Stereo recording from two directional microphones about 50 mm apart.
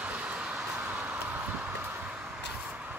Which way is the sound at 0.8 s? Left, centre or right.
Right.